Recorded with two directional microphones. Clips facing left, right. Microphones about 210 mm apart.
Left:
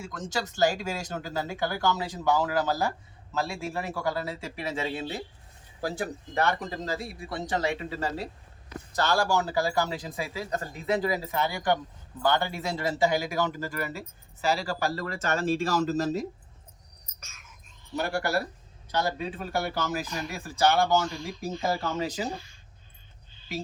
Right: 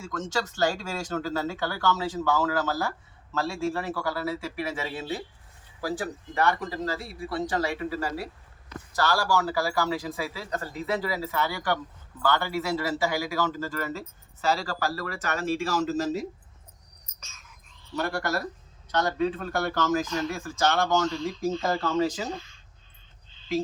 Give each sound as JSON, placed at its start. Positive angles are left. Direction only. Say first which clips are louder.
{"t": 0.6, "sound": "a man's voice", "louder": "left 3 dB", "side_deg": 20}
{"t": 17.9, "sound": "speech", "louder": "left 1 dB", "side_deg": 15}